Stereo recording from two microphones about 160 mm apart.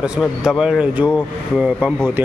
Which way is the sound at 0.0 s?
5° right (ahead or behind).